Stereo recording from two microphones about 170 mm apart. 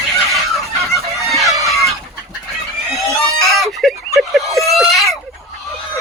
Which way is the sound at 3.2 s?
Centre (ahead or behind).